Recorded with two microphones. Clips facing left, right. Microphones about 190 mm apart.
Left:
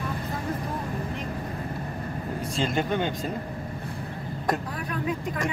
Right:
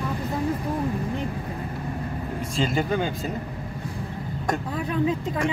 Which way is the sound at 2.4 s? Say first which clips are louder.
Right 2 dB; centre (ahead or behind).